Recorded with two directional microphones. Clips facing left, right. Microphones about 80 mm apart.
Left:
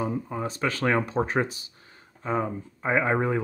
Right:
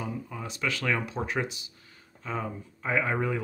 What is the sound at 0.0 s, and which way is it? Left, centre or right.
Speech, left.